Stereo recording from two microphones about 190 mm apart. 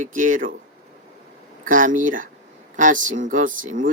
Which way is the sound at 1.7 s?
45° right (ahead or behind).